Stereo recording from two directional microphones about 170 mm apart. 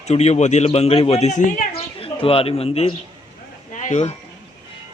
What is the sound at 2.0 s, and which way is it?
Speech, 35° left (ahead or behind).